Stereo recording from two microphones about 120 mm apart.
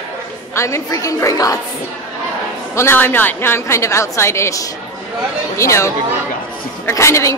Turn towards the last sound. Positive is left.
turn(degrees=25)  # may be behind; listen again after turning